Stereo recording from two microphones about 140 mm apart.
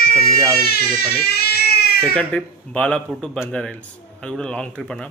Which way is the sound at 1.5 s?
90° left.